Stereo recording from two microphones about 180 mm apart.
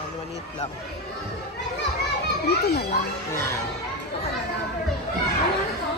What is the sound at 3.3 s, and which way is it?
Speech, 15° left (ahead or behind).